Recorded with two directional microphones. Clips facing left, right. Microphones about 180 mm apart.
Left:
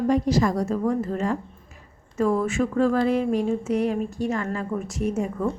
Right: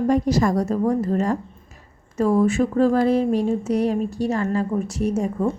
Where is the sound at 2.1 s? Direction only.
30° right (ahead or behind).